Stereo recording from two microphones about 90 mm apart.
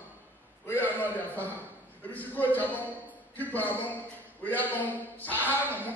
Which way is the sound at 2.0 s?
20° left (ahead or behind).